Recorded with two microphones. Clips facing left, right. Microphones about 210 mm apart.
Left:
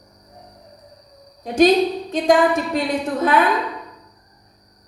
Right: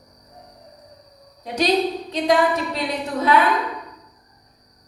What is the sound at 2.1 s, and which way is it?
A woman's voice, 50° left (ahead or behind).